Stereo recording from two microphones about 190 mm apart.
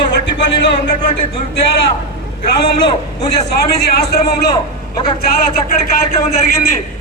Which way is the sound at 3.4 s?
60° left (ahead or behind).